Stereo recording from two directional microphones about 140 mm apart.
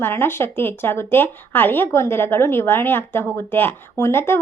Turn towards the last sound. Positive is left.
turn(degrees=15)  # may be behind; listen again after turning